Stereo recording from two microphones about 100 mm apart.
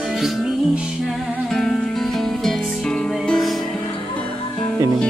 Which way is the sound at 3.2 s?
5° left (ahead or behind).